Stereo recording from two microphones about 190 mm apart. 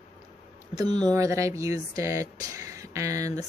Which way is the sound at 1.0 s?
15° right (ahead or behind).